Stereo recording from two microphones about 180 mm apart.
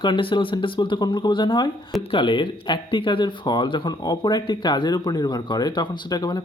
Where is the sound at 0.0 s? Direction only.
30° left (ahead or behind).